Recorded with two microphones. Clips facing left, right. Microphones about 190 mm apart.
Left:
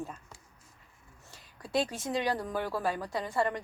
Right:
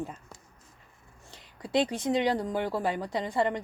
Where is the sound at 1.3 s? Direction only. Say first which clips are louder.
Right 4 dB; 20° right (ahead or behind).